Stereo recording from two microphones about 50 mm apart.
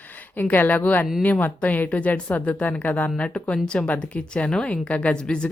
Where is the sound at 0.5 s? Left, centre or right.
Left.